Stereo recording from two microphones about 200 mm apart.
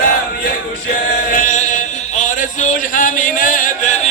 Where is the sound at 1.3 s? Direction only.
40° left (ahead or behind).